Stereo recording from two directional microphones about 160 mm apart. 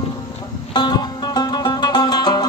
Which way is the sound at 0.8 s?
25° left (ahead or behind).